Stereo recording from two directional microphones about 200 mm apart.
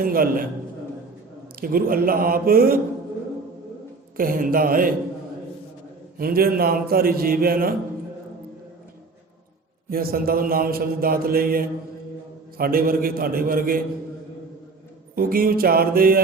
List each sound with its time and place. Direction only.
0.0 s mantra: 45° right (ahead or behind)
1.6 s mantra: 45° right (ahead or behind)
4.2 s mantra: 45° right (ahead or behind)
6.1 s mantra: 50° right (ahead or behind)
9.9 s mantra: 50° right (ahead or behind)
15.1 s mantra: 45° right (ahead or behind)